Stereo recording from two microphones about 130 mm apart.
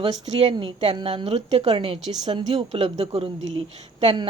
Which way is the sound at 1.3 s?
60° right (ahead or behind).